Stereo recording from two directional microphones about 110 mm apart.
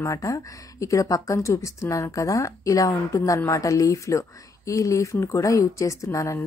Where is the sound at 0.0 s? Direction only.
30° left (ahead or behind).